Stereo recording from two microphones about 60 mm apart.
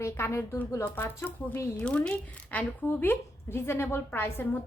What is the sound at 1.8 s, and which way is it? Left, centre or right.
Speech, centre.